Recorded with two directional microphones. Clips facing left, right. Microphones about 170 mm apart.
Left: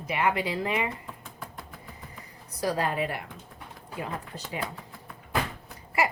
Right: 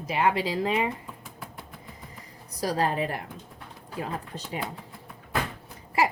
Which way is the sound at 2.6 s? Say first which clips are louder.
Right 1 dB; 35° right (ahead or behind).